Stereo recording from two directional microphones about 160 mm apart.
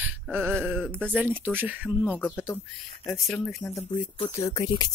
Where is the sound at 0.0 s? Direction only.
10° right (ahead or behind).